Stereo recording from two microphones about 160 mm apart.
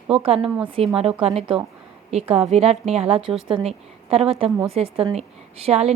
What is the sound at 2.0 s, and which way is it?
A woman's voice, 40° right (ahead or behind).